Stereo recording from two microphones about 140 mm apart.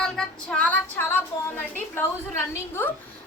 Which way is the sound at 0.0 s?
5° left (ahead or behind).